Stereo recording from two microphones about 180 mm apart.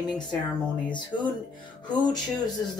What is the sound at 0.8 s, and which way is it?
Speech, 25° left (ahead or behind).